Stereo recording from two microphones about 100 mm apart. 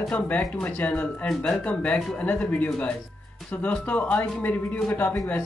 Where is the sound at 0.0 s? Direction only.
10° left (ahead or behind).